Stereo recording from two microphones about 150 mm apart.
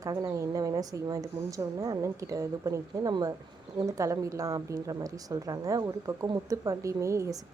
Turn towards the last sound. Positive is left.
turn(degrees=-20)  # may be behind; listen again after turning